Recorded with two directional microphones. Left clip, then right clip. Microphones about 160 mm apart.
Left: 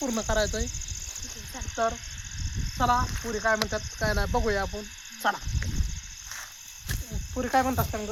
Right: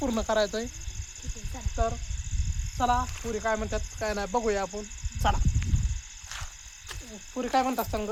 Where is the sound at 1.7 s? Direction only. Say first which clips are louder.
Left 3 dB; 30° left (ahead or behind).